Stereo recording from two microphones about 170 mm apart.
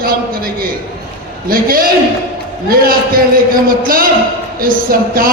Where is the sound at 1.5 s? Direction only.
60° right (ahead or behind).